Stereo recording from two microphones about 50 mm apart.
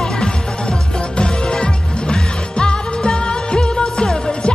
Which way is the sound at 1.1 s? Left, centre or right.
Centre.